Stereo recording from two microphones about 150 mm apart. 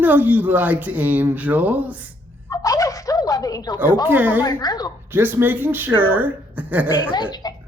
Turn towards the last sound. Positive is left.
turn(degrees=30)  # may be behind; listen again after turning